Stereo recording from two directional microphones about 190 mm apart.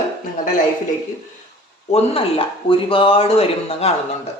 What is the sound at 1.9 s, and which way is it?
Speech, 30° left (ahead or behind).